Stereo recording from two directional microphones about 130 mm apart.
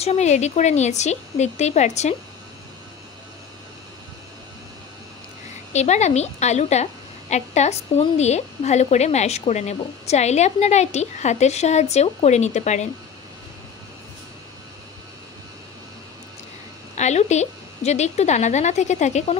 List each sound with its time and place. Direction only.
0.0 s a woman's voice: 60° left (ahead or behind)
5.7 s a woman's voice: 60° left (ahead or behind)
16.9 s a woman's voice: 60° left (ahead or behind)